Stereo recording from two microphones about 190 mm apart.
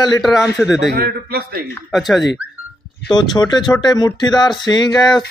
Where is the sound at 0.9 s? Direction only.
55° right (ahead or behind).